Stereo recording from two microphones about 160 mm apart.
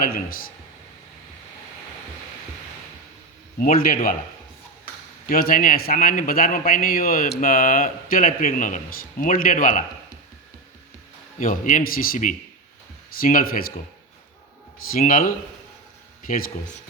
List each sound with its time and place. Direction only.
3.6 s speech: 60° left (ahead or behind)
5.3 s speech: 65° left (ahead or behind)
11.3 s speech: 55° left (ahead or behind)
14.9 s speech: 60° left (ahead or behind)